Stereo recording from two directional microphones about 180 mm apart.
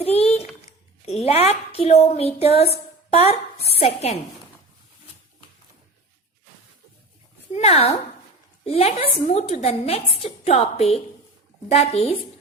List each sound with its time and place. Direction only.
0.0 s typing: 35° left (ahead or behind)
1.0 s a woman's voice: 35° left (ahead or behind)
7.5 s a woman's voice: 35° left (ahead or behind)